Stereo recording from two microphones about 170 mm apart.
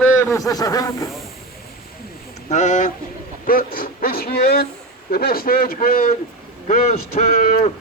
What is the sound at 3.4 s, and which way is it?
A man's voice, 55° left (ahead or behind).